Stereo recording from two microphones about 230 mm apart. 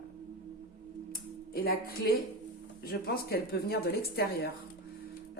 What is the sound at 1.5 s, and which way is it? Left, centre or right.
A woman's voice, left.